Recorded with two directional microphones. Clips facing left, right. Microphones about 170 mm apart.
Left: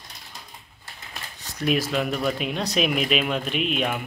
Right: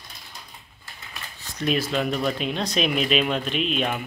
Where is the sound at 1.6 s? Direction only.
10° left (ahead or behind).